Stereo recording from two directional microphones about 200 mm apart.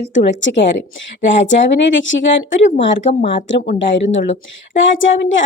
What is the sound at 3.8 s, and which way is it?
A woman's voice, 65° left (ahead or behind).